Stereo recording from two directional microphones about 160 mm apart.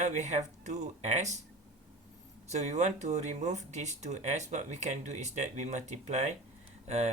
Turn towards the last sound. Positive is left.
turn(degrees=-40)  # may be behind; listen again after turning